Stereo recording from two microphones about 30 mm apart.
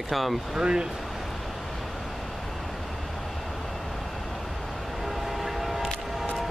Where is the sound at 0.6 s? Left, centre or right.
Right.